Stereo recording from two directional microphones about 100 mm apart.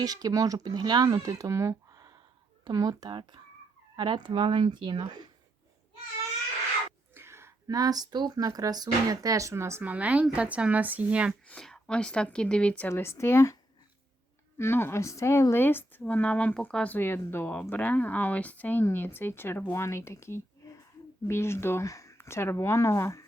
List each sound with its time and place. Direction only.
0.0 s speech: 40° right (ahead or behind)
3.1 s speech: 55° right (ahead or behind)
7.1 s whispering: 25° right (ahead or behind)
7.7 s speech: 40° right (ahead or behind)
9.8 s speech: 15° right (ahead or behind)
11.4 s speech: 5° left (ahead or behind)
12.9 s speech: 25° left (ahead or behind)
14.6 s speech: 25° left (ahead or behind)